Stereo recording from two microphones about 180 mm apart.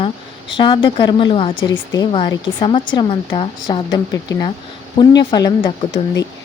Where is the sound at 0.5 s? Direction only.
25° left (ahead or behind).